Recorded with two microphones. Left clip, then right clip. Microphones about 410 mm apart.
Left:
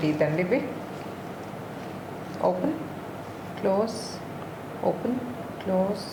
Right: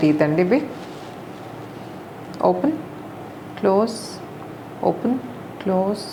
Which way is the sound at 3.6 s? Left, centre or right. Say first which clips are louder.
Right 7 dB; right.